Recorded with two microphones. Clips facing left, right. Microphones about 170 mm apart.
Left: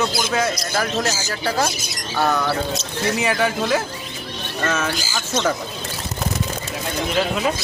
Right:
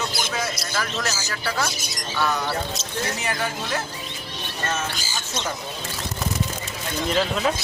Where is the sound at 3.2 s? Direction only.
90° left.